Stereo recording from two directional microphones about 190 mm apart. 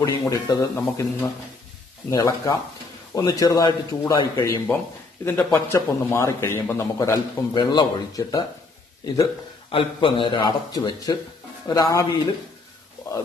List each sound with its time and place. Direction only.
0.0 s a man's voice: 20° left (ahead or behind)